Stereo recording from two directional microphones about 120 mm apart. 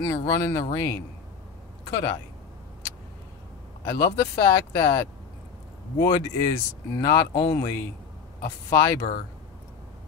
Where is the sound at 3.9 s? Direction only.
30° left (ahead or behind).